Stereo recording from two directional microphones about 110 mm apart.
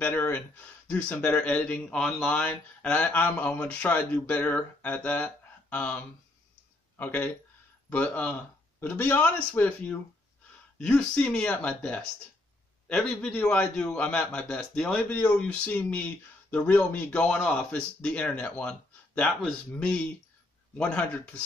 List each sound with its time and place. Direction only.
0.0 s speech: 20° left (ahead or behind)